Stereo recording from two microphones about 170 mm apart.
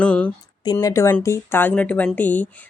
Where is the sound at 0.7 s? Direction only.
20° left (ahead or behind).